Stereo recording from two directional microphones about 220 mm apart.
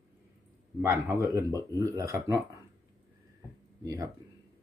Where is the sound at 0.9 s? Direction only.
15° right (ahead or behind).